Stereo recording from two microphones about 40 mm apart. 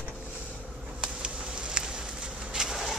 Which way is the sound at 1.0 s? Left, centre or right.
Right.